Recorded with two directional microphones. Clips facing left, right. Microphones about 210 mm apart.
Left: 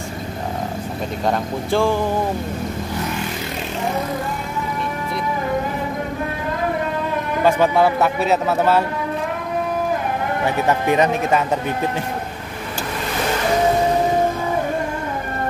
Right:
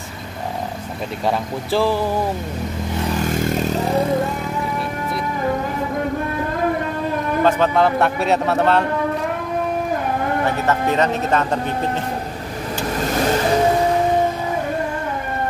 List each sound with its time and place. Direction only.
1.2 s a man's voice: 5° right (ahead or behind)
3.2 s vehicle: 45° right (ahead or behind)
7.4 s a man's voice: 10° left (ahead or behind)
10.4 s speech: 15° left (ahead or behind)